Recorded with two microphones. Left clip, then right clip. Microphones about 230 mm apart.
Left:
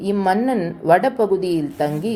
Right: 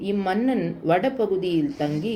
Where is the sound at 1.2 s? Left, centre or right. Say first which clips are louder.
Left 5 dB; left.